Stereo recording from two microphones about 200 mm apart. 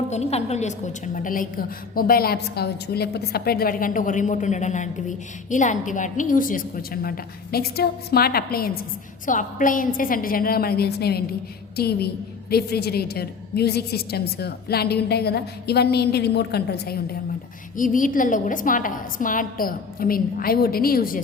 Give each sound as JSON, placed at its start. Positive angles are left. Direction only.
{"t": 0.1, "sound": "a woman's voice", "side_deg": 30}
{"t": 17.7, "sound": "a woman's voice", "side_deg": 40}